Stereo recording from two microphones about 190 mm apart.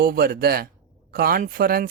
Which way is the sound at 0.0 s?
50° right (ahead or behind).